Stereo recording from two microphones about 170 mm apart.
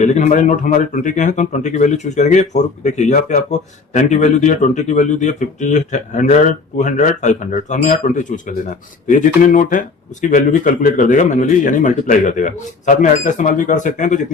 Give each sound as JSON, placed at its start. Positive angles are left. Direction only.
{"t": 0.0, "sound": "speech", "side_deg": 45}